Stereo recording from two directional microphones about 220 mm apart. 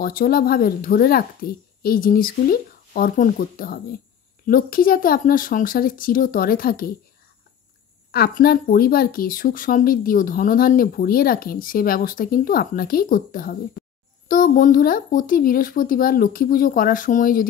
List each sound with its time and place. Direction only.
0.0 s speech: 40° left (ahead or behind)
8.1 s speech: 45° left (ahead or behind)